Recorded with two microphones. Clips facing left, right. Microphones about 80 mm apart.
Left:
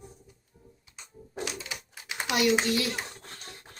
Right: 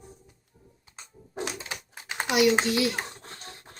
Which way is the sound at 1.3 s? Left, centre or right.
Right.